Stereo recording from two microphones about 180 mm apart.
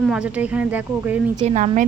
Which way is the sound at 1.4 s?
40° right (ahead or behind).